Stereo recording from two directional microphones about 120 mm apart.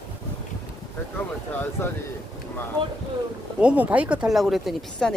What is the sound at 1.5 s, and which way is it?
Speech, 15° left (ahead or behind).